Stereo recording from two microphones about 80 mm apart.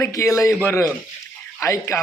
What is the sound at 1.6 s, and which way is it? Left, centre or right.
Speech, left.